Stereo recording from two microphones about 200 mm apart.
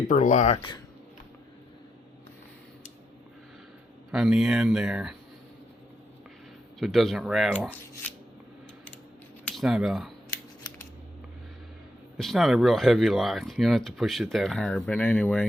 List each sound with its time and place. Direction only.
0.1 s speech: 35° left (ahead or behind)
4.1 s speech: 5° right (ahead or behind)
6.7 s speech: centre (ahead or behind)
9.4 s speech: 5° left (ahead or behind)
12.1 s speech: centre (ahead or behind)